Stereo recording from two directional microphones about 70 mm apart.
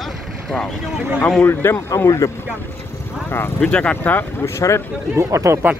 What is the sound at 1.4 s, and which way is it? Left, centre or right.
Speech, left.